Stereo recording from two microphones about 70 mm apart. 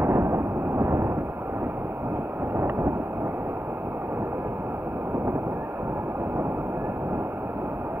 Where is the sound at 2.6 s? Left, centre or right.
Right.